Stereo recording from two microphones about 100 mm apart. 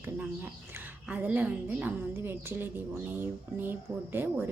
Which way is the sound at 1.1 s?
15° right (ahead or behind).